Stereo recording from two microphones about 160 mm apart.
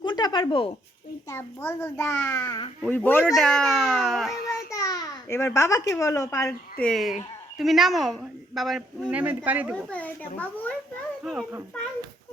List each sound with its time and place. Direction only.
0.0 s a sound: 25° left (ahead or behind)
1.3 s a child's voice: 15° left (ahead or behind)
2.8 s a child's voice: 10° left (ahead or behind)
4.7 s babbling: 20° left (ahead or behind)
5.5 s a woman's voice: 20° left (ahead or behind)
6.8 s a woman's voice: centre (ahead or behind)
9.7 s a child's voice: 10° left (ahead or behind)
11.2 s speech: centre (ahead or behind)